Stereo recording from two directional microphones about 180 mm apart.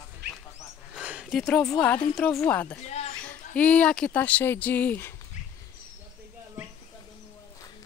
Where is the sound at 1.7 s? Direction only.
10° left (ahead or behind).